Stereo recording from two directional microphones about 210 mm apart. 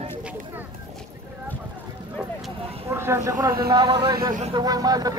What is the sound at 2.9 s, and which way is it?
Speech, 10° right (ahead or behind).